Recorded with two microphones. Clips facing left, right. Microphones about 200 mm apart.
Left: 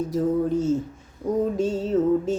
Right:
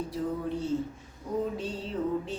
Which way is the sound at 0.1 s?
45° left (ahead or behind).